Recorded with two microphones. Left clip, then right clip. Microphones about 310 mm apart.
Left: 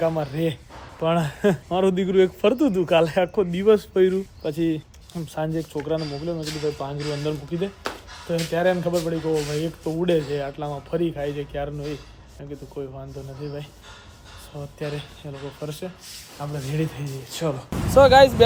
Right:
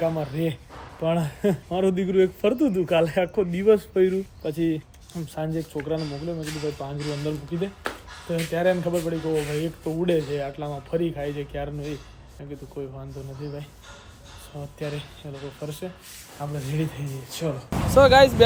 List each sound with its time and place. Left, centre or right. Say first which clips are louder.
0.0 s speech: left 2 dB; centre
14.8 s speech: left 2 dB; centre